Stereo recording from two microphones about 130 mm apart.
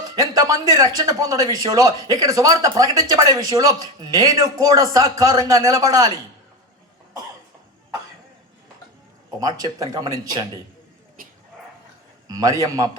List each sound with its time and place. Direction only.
0.2 s speech: 25° right (ahead or behind)
9.4 s speech: 30° right (ahead or behind)
11.2 s bow-wow: 90° right
12.3 s speech: 30° right (ahead or behind)